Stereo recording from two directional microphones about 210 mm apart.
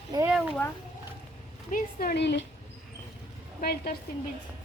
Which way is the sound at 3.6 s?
40° left (ahead or behind).